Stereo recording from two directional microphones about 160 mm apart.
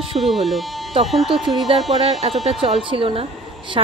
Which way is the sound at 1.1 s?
Centre (ahead or behind).